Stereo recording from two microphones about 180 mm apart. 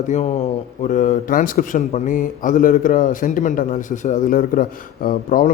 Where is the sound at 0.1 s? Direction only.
40° left (ahead or behind).